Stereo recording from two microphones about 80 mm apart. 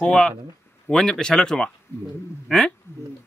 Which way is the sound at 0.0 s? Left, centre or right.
Centre.